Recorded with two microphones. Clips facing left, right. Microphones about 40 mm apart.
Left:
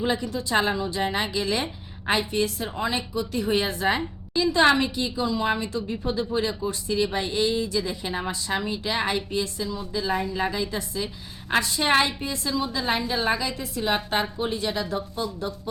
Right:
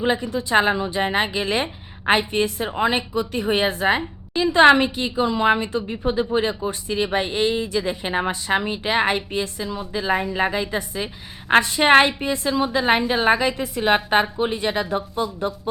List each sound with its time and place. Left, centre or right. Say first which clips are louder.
0.0 s a woman's voice: right 4 dB; right